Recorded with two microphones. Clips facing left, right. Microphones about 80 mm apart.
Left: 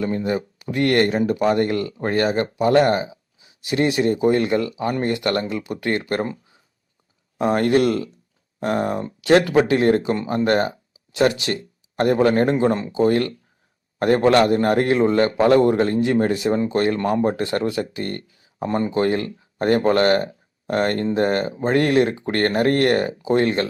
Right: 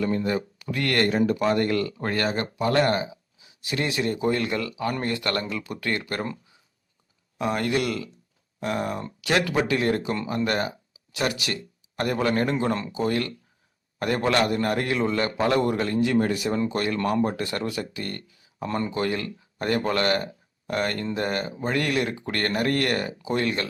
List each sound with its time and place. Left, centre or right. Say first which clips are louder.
0.0 s speech: left 2 dB; left
7.3 s a man's voice: left 7 dB; left
13.0 s a man's voice: left 11 dB; left